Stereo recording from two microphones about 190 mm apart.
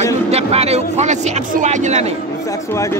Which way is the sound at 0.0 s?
35° right (ahead or behind).